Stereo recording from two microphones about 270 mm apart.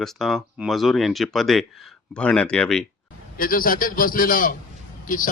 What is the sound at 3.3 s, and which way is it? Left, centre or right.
A man's voice, left.